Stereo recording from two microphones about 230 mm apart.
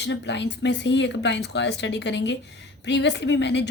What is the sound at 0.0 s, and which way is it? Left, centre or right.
Speech, left.